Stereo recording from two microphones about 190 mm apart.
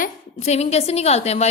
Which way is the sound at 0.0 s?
35° left (ahead or behind).